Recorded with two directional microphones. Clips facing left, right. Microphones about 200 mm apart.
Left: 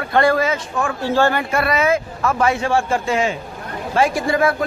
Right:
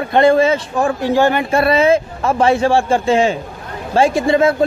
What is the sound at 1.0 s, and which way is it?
Speech, 15° right (ahead or behind).